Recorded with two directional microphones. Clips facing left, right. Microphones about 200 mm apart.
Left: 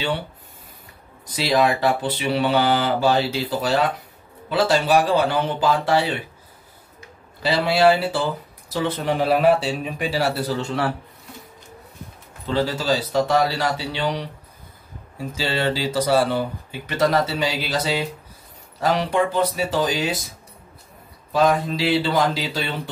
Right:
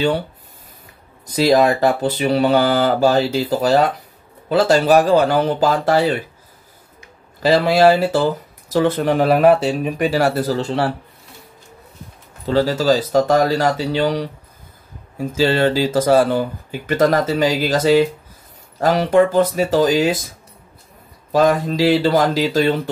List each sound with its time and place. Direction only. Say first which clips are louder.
1.3 s speech: right 6 dB; 45° right (ahead or behind)
7.4 s speech: right 5 dB; 45° right (ahead or behind)
12.4 s speech: right 6 dB; 40° right (ahead or behind)
21.3 s speech: right 4 dB; 45° right (ahead or behind)